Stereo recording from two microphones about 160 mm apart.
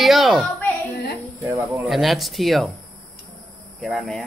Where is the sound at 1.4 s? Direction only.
20° right (ahead or behind).